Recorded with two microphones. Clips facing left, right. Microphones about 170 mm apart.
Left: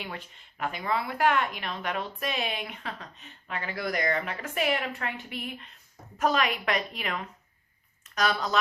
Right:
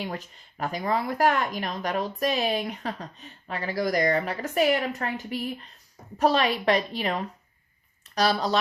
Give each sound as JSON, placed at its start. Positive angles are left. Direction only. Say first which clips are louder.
{"t": 0.0, "sound": "speech", "louder": "right 6 dB", "side_deg": -40}